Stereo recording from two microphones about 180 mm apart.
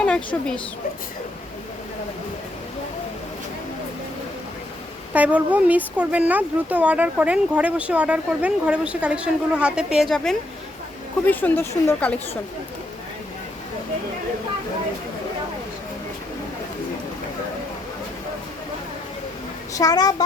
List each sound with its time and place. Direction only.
0.0 s speech: 5° left (ahead or behind)
5.1 s speech: 10° right (ahead or behind); by 12.4 s 10° left (ahead or behind)
19.7 s a woman's voice: 20° left (ahead or behind)